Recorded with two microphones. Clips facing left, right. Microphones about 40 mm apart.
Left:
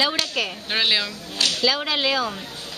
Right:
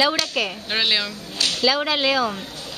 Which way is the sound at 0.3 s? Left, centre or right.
Centre.